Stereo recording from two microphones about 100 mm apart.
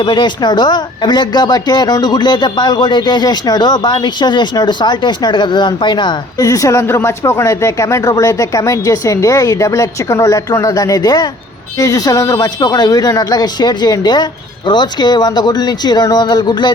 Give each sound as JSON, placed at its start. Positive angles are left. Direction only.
{"t": 0.0, "sound": "speech", "side_deg": 50}
{"t": 6.3, "sound": "speech", "side_deg": 35}